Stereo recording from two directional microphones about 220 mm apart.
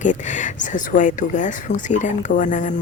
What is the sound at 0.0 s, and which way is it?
Speech, 35° left (ahead or behind).